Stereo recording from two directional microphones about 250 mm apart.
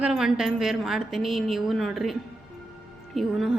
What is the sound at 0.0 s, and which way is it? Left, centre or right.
A woman's voice, centre.